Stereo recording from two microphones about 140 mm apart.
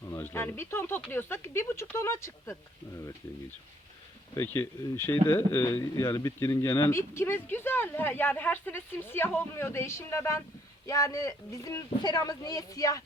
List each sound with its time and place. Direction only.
0.1 s speech: 15° left (ahead or behind)
4.4 s speech: 20° left (ahead or behind)